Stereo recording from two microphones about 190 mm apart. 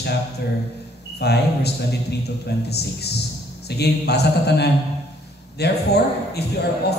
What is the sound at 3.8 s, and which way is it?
A man's voice, 60° left (ahead or behind).